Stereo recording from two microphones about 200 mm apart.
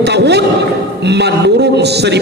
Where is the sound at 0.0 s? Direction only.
55° right (ahead or behind).